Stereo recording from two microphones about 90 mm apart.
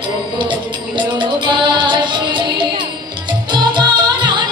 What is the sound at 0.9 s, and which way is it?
Music, 60° right (ahead or behind).